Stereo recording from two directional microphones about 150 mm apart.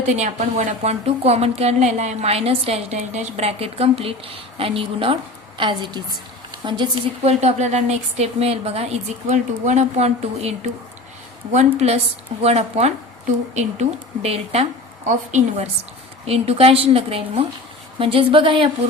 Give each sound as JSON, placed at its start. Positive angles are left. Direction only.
{"t": 0.0, "sound": "a woman's voice", "side_deg": -50}
{"t": 7.3, "sound": "a woman's voice", "side_deg": -50}